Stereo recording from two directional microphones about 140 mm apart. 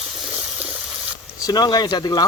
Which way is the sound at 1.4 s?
30° left (ahead or behind).